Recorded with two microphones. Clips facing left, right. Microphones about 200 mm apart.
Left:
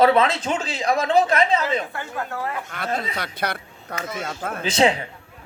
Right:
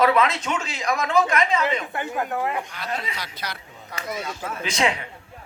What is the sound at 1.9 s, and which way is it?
Speech, 15° right (ahead or behind).